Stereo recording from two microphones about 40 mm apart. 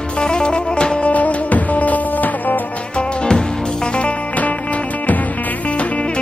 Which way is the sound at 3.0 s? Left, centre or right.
Left.